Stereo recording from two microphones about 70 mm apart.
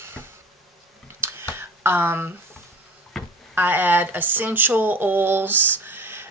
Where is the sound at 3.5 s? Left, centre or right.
Right.